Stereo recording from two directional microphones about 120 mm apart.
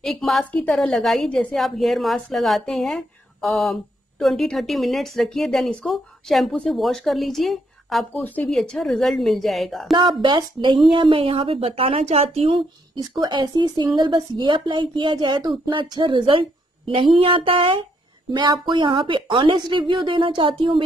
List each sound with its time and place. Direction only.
0.0 s a woman's voice: centre (ahead or behind)
9.9 s a woman's voice: 35° right (ahead or behind)